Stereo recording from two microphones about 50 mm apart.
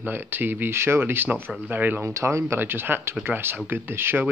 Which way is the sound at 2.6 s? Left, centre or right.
Right.